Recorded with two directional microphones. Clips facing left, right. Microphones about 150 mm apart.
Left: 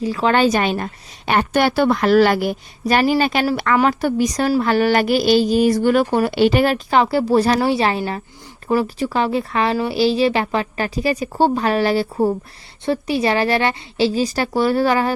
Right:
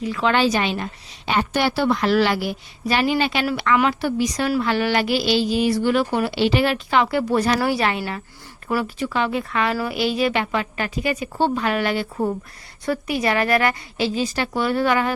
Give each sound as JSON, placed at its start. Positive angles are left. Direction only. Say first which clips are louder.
{"t": 0.0, "sound": "a woman's voice", "louder": "left 3 dB", "side_deg": 35}